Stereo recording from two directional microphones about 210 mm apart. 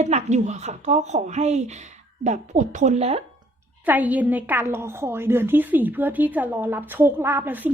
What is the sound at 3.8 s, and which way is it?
A woman's voice, 10° right (ahead or behind).